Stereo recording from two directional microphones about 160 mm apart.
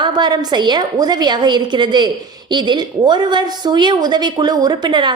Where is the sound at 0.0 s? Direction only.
25° right (ahead or behind).